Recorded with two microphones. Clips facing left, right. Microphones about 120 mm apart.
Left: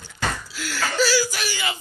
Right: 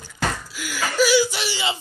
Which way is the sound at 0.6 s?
10° right (ahead or behind).